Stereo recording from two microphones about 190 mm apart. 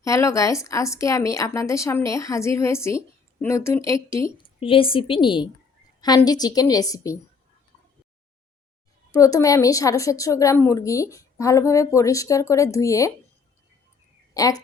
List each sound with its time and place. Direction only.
0.0 s a woman's voice: 15° left (ahead or behind)
4.4 s a woman's voice: 30° left (ahead or behind)
9.1 s a woman's voice: 15° left (ahead or behind)
14.3 s a woman's voice: 20° left (ahead or behind)